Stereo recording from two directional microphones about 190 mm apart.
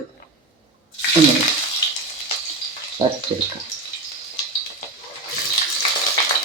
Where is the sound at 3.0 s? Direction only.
30° right (ahead or behind).